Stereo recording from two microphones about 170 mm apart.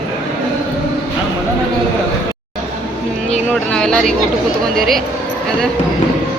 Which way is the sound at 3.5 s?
5° left (ahead or behind).